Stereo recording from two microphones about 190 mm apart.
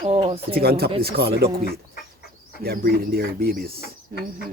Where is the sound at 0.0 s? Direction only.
25° right (ahead or behind).